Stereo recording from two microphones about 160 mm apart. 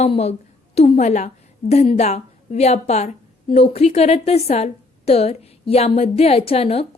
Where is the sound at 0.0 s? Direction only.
40° left (ahead or behind).